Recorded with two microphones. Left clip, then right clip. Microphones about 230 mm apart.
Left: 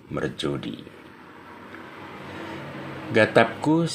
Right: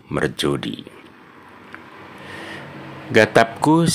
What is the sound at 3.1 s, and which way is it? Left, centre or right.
Speech, right.